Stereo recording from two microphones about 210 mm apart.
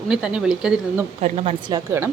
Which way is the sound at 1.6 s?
15° right (ahead or behind).